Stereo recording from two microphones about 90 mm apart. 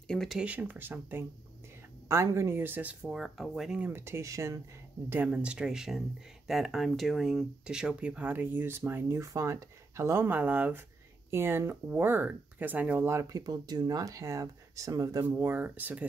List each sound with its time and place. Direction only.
0.1 s speech: 5° left (ahead or behind)
0.4 s speech: 15° right (ahead or behind)
3.8 s speech: 25° right (ahead or behind)
5.3 s speech: 10° right (ahead or behind)
13.1 s speech: 35° right (ahead or behind)
13.5 s speech: 50° right (ahead or behind)
15.3 s speech: 25° right (ahead or behind)